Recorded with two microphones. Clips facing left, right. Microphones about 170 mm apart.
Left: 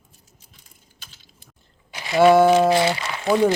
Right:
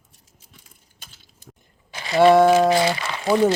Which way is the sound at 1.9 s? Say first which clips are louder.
Even; centre (ahead or behind).